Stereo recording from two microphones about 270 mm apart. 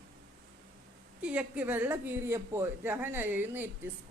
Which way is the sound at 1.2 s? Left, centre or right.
Centre.